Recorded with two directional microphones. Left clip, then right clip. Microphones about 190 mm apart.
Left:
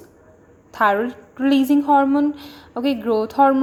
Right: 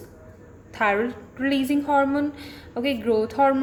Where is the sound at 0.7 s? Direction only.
20° left (ahead or behind).